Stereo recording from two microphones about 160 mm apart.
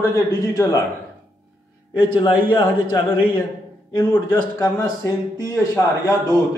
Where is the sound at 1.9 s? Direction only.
25° left (ahead or behind).